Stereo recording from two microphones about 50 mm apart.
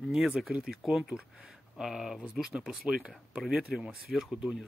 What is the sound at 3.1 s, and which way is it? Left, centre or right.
Speech, centre.